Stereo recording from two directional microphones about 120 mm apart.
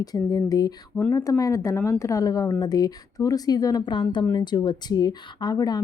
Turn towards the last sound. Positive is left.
turn(degrees=35)  # may be behind; listen again after turning